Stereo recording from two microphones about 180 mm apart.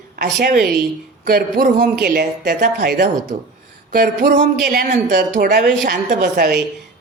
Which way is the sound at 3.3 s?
50° right (ahead or behind).